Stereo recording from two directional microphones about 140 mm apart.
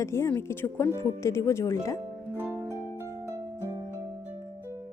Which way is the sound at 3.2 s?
15° left (ahead or behind).